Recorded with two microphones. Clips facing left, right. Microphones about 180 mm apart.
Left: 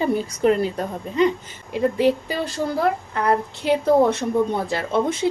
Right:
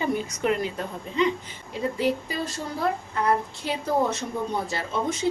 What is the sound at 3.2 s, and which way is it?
A woman's voice, 60° left (ahead or behind).